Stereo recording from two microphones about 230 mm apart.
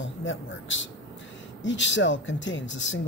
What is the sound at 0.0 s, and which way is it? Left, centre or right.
A man's voice, left.